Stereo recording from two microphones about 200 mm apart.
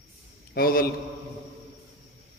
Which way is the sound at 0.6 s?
45° left (ahead or behind).